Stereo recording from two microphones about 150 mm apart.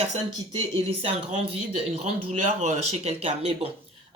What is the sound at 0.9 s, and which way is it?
Speech, 40° right (ahead or behind).